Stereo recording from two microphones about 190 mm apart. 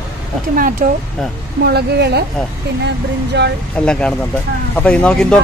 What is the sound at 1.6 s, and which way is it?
Speech, 60° right (ahead or behind).